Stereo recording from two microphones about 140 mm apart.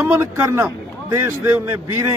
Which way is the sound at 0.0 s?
20° right (ahead or behind).